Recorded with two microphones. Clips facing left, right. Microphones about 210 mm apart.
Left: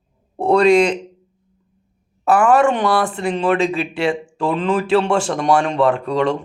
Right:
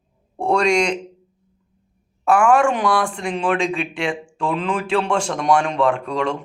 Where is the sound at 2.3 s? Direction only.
5° left (ahead or behind).